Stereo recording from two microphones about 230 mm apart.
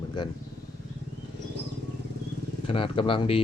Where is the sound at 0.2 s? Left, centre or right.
Centre.